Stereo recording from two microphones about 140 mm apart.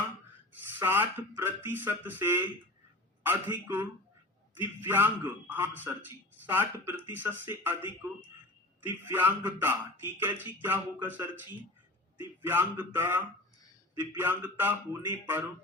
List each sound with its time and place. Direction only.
0.8 s speech: 15° right (ahead or behind)
8.8 s speech: 15° right (ahead or behind)